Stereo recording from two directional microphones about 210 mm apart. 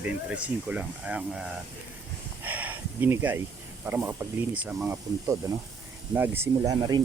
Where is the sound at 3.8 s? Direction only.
10° right (ahead or behind).